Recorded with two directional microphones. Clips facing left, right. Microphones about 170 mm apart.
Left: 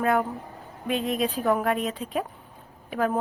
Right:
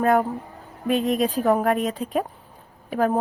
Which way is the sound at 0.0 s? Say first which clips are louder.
Right 4 dB; 40° right (ahead or behind).